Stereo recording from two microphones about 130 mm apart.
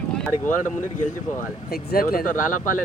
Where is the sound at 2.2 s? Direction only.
90° left.